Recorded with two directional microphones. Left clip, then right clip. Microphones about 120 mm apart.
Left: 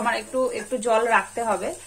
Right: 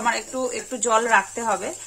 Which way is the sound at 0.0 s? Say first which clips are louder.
Left 1 dB; 30° right (ahead or behind).